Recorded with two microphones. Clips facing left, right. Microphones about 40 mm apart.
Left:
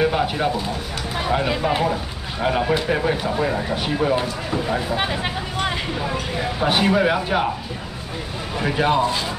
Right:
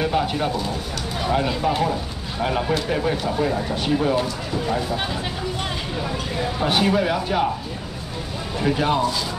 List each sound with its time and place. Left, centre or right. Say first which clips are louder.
0.0 s a sound: left 2 dB; centre
1.6 s speech: left 1 dB; left
6.6 s speech: left 2 dB; centre
8.5 s speech: left 1 dB; centre